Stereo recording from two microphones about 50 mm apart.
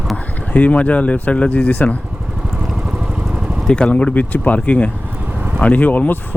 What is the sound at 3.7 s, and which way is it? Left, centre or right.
Speech, left.